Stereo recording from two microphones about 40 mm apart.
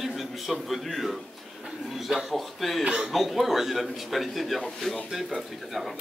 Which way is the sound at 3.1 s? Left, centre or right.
Centre.